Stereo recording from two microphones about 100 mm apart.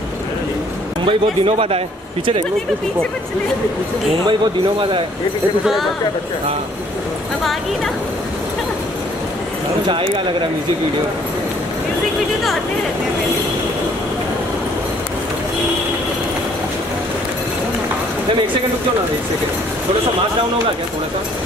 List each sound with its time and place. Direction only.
1.0 s speech: 70° right (ahead or behind)
4.3 s speech: 60° right (ahead or behind)
9.8 s speech: 55° right (ahead or behind)